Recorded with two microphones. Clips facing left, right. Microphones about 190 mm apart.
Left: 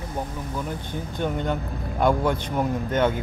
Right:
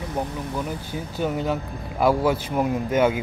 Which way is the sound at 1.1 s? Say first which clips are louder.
Right 2 dB; 5° right (ahead or behind).